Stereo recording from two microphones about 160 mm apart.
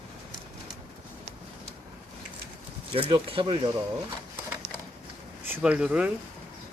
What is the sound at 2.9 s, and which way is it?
Speech, 35° right (ahead or behind).